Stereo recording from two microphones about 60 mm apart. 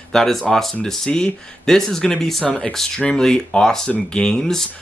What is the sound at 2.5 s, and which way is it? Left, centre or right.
Speech, left.